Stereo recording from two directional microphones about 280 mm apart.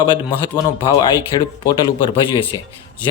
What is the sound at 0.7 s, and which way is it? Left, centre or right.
A man's voice, centre.